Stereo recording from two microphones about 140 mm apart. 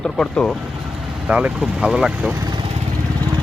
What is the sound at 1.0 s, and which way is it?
Speech, 10° right (ahead or behind).